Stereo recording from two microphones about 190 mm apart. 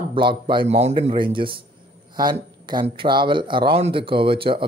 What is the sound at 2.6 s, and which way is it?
A man's voice, 25° right (ahead or behind).